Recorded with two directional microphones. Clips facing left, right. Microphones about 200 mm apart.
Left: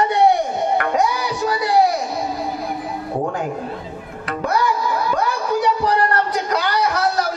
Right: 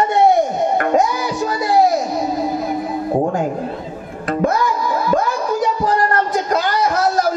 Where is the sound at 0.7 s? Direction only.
45° right (ahead or behind).